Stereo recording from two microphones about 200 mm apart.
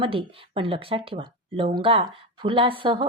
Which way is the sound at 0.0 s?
25° right (ahead or behind).